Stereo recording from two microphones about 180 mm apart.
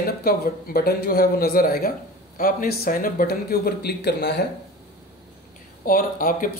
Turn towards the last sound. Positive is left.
turn(degrees=50)  # may be behind; listen again after turning